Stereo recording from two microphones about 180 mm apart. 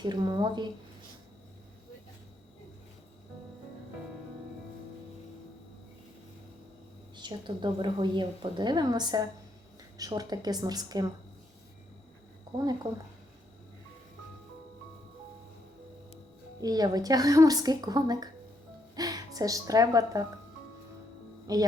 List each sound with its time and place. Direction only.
0.0 s a woman's voice: 25° right (ahead or behind)
7.2 s a woman's voice: 25° right (ahead or behind)
12.5 s a woman's voice: 20° right (ahead or behind)
16.6 s a woman's voice: 20° right (ahead or behind)
21.4 s speech: 20° right (ahead or behind)